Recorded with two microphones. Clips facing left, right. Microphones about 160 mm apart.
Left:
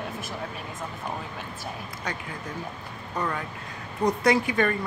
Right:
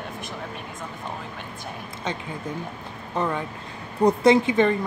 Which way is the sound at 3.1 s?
20° right (ahead or behind).